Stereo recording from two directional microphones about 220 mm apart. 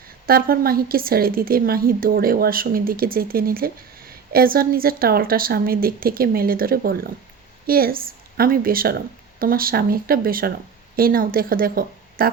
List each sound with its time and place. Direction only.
0.3 s a woman's voice: 40° right (ahead or behind)